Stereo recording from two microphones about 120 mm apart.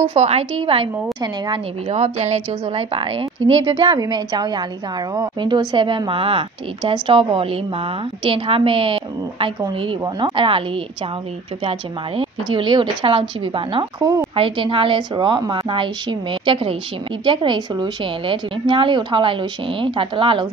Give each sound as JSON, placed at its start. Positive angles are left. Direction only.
{"t": 0.1, "sound": "a woman's voice", "side_deg": -60}
{"t": 1.9, "sound": "a woman's voice", "side_deg": -65}
{"t": 12.2, "sound": "a woman's voice", "side_deg": -45}
{"t": 13.9, "sound": "a woman's voice", "side_deg": -30}
{"t": 14.3, "sound": "a woman's voice", "side_deg": -50}